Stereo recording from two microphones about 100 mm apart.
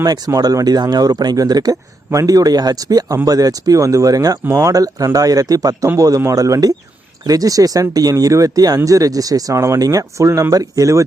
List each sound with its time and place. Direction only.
0.0 s speech: 40° right (ahead or behind)